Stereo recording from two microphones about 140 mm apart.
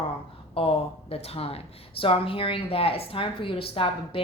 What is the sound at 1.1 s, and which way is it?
A woman's voice, 45° left (ahead or behind).